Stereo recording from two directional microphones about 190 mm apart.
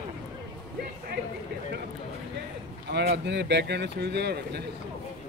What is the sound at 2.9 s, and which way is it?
Speech, 60° right (ahead or behind).